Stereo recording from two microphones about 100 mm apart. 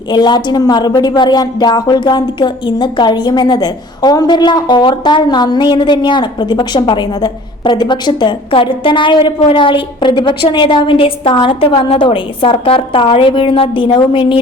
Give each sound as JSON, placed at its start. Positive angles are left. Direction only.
{"t": 0.1, "sound": "a woman's voice", "side_deg": 45}